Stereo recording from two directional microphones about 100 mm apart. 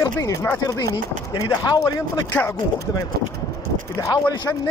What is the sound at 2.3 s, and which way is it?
Speech, 10° left (ahead or behind).